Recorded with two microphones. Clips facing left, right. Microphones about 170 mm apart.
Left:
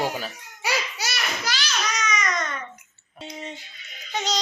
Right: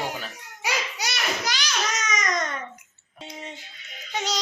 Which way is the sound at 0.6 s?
20° right (ahead or behind).